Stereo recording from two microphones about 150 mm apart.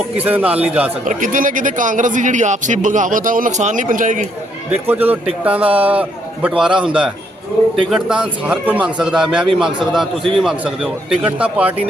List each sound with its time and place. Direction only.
0.2 s a man's voice: 10° right (ahead or behind)
1.0 s a man's voice: 60° right (ahead or behind)
4.9 s a man's voice: 10° right (ahead or behind)